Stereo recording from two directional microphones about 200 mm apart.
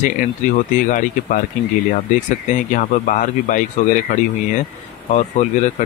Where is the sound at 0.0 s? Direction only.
40° left (ahead or behind).